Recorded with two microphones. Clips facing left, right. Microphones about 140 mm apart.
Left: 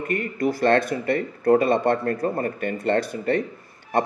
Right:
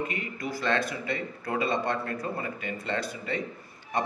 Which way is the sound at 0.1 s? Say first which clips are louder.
Left 10 dB; 55° left (ahead or behind).